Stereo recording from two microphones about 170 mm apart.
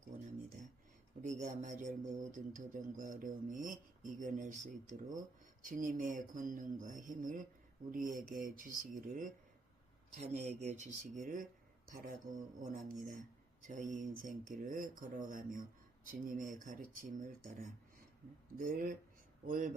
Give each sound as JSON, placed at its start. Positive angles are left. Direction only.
{"t": 1.2, "sound": "speech", "side_deg": -45}